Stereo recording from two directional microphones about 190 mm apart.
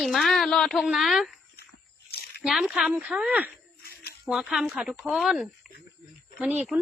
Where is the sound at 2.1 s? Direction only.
55° left (ahead or behind).